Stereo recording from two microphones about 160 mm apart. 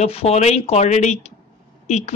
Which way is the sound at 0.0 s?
40° left (ahead or behind).